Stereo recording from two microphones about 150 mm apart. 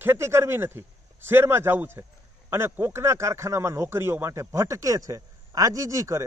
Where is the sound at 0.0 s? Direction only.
15° right (ahead or behind).